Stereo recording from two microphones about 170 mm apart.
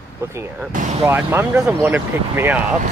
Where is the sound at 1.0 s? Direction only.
10° right (ahead or behind).